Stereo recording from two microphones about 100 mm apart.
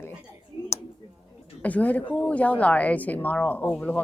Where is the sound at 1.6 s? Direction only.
15° left (ahead or behind).